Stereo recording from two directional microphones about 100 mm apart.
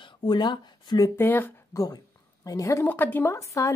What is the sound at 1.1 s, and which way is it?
Speech, 20° left (ahead or behind).